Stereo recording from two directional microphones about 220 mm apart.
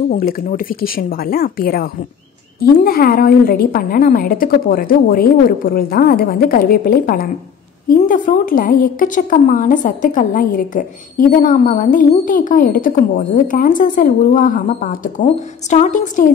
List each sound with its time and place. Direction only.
0.1 s a woman's voice: 40° left (ahead or behind)